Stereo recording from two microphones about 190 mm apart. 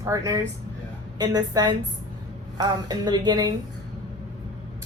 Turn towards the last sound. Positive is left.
turn(degrees=-20)  # may be behind; listen again after turning